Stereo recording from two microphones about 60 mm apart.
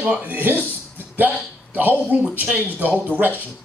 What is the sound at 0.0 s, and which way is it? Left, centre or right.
Speech, right.